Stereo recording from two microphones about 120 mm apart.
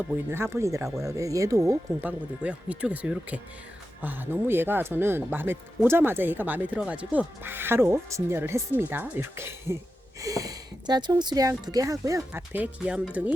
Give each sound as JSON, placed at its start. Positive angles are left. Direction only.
{"t": 0.1, "sound": "speech", "side_deg": -20}
{"t": 12.3, "sound": "speech", "side_deg": -15}